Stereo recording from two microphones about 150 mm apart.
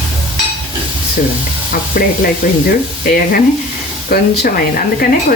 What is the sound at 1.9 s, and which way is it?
Speech, 75° left (ahead or behind).